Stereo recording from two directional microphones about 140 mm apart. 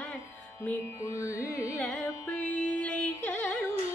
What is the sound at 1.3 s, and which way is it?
Carnatic music, 20° left (ahead or behind).